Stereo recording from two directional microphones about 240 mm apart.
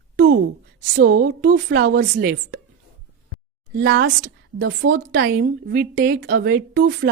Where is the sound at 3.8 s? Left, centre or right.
Right.